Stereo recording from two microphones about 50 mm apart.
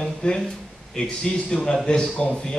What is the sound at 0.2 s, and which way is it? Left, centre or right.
A man's voice, left.